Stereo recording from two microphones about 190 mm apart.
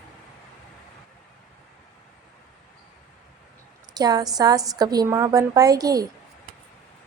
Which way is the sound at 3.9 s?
20° right (ahead or behind).